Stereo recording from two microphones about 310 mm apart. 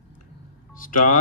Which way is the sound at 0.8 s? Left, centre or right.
Left.